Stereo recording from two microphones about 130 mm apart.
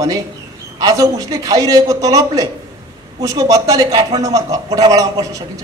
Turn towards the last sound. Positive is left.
turn(degrees=-25)  # may be behind; listen again after turning